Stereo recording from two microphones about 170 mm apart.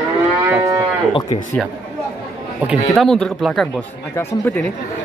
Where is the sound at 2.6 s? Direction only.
Centre (ahead or behind).